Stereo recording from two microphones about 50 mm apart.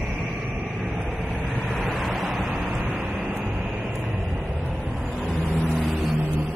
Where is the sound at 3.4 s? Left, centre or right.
Centre.